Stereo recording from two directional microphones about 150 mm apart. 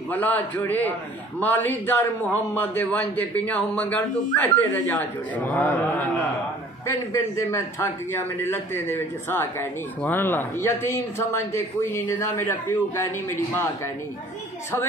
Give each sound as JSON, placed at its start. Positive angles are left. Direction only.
{"t": 0.1, "sound": "a man's voice", "side_deg": 10}